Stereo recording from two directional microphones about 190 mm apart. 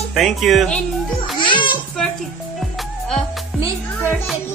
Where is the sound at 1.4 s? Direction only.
25° left (ahead or behind).